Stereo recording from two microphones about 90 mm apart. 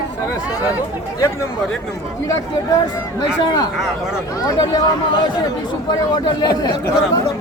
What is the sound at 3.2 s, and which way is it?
Speech, 50° left (ahead or behind).